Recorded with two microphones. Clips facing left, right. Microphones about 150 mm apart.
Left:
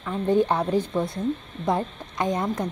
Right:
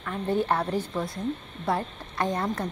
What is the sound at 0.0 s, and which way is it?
A woman's voice, 15° left (ahead or behind).